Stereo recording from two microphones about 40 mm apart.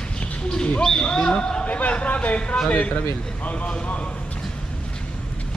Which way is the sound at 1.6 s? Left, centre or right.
Left.